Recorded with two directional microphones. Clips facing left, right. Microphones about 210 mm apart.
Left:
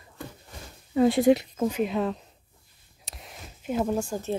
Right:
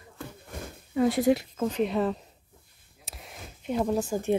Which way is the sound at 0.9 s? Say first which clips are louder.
Left 3 dB; 25° left (ahead or behind).